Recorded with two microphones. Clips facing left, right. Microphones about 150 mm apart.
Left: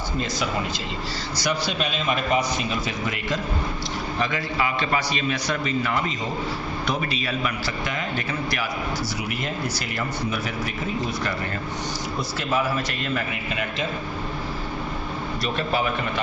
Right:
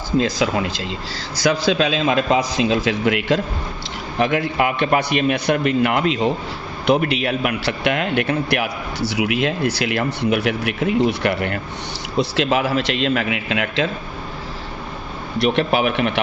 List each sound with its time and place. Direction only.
0.2 s a man's voice: 90° right
4.2 s a man's voice: 60° right (ahead or behind)
12.1 s a man's voice: 80° right
15.4 s a man's voice: 70° right (ahead or behind)